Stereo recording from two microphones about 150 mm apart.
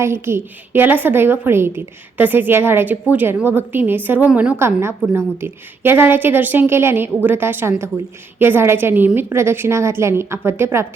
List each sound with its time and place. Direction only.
0.0 s a woman's voice: 15° right (ahead or behind)